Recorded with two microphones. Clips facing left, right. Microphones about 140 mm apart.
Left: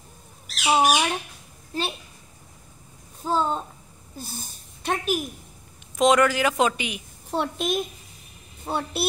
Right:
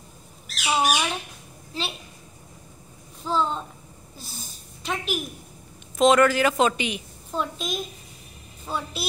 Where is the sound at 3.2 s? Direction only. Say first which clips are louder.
Left 1 dB; 45° left (ahead or behind).